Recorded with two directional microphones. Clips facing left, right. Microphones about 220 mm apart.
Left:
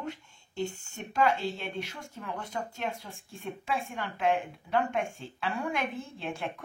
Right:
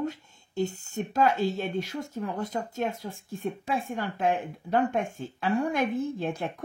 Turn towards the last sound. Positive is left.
turn(degrees=-40)  # may be behind; listen again after turning